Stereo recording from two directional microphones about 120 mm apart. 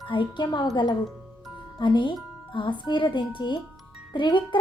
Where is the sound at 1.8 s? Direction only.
40° left (ahead or behind).